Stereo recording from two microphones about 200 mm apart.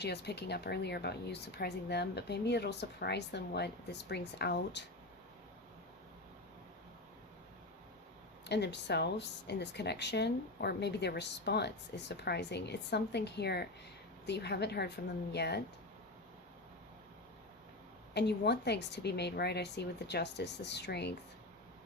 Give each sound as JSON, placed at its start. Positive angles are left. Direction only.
{"t": 0.0, "sound": "speech", "side_deg": 55}
{"t": 8.4, "sound": "speech", "side_deg": 60}
{"t": 18.1, "sound": "speech", "side_deg": 55}